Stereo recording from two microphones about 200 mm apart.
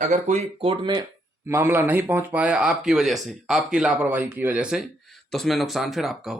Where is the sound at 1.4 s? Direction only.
10° right (ahead or behind).